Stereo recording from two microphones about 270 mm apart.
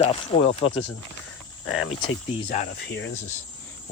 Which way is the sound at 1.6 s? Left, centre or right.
Left.